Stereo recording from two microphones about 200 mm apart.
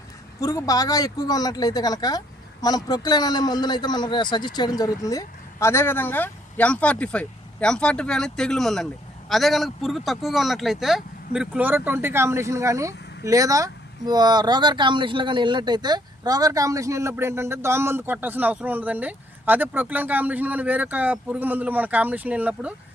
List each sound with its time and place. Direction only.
0.3 s speech: 15° left (ahead or behind); by 22.7 s 5° right (ahead or behind)